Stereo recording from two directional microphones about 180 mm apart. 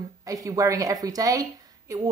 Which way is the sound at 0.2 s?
20° right (ahead or behind).